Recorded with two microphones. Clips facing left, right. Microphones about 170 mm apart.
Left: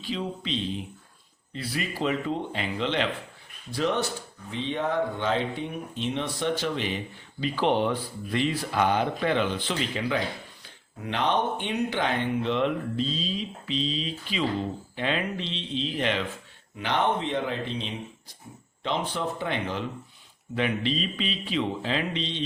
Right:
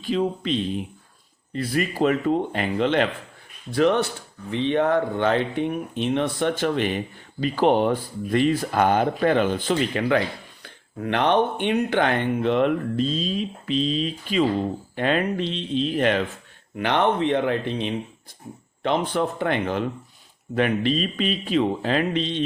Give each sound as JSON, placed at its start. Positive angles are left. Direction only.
{"t": 0.0, "sound": "speech", "side_deg": -50}
{"t": 16.7, "sound": "speech", "side_deg": -60}